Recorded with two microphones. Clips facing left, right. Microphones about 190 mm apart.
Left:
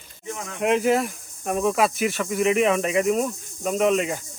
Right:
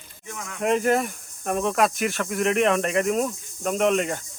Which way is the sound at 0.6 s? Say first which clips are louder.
Left 1 dB; centre (ahead or behind).